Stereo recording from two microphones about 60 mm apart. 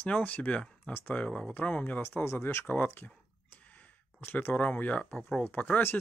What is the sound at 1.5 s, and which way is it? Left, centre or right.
Speech, left.